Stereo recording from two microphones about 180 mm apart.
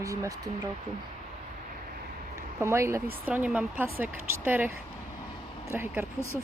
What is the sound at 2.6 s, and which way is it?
Speech, 15° right (ahead or behind).